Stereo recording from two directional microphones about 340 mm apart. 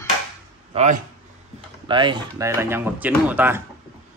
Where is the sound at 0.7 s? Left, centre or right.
Centre.